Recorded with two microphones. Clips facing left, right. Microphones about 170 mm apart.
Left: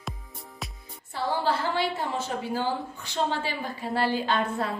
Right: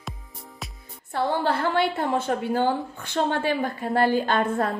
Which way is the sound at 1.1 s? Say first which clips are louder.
Right 3 dB; 60° right (ahead or behind).